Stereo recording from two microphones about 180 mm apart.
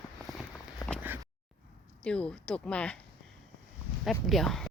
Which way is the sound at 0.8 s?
20° left (ahead or behind).